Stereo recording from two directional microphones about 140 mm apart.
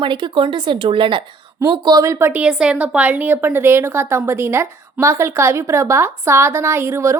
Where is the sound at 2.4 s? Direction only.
5° right (ahead or behind).